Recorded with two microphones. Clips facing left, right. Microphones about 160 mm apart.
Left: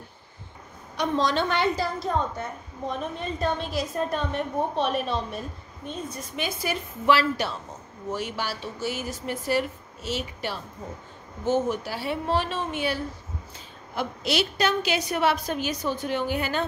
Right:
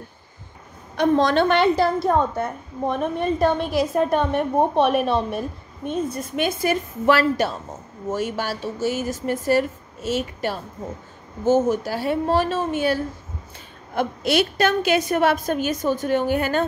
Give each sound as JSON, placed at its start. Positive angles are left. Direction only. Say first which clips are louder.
{"t": 0.9, "sound": "a woman's voice", "louder": "right 7 dB", "side_deg": -55}